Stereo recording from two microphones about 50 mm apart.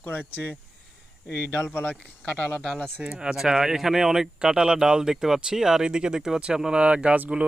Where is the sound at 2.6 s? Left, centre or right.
Centre.